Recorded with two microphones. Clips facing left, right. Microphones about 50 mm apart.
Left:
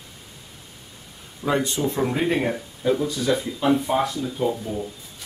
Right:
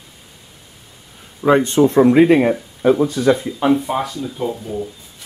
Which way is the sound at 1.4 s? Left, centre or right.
Right.